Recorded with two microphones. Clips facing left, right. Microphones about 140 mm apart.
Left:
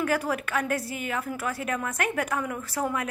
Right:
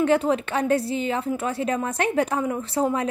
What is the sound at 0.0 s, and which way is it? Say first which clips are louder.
A woman's voice: right 7 dB; 25° right (ahead or behind).